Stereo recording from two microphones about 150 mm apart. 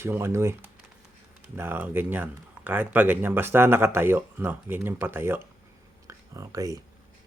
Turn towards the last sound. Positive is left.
turn(degrees=-20)  # may be behind; listen again after turning